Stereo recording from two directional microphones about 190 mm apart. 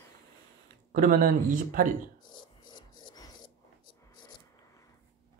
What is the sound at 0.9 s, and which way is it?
Speech, 45° right (ahead or behind).